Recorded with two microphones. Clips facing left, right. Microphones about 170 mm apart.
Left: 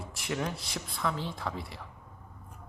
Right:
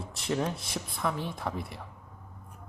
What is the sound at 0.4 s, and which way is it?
Speech, 20° right (ahead or behind).